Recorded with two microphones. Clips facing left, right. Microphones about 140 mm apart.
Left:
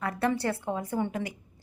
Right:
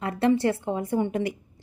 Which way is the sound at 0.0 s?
25° right (ahead or behind).